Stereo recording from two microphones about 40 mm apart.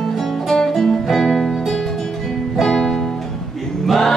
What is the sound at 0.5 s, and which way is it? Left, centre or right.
Music, centre.